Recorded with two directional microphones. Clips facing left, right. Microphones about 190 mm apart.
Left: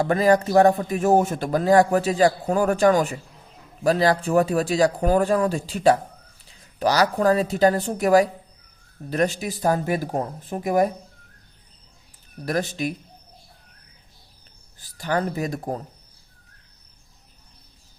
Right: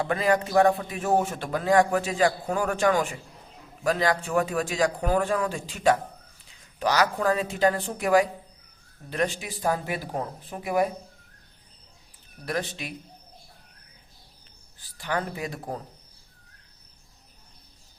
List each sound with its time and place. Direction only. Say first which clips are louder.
0.0 s speech: left 6 dB; 40° left (ahead or behind)
12.5 s speech: left 6 dB; 40° left (ahead or behind)
14.8 s speech: left 5 dB; 40° left (ahead or behind)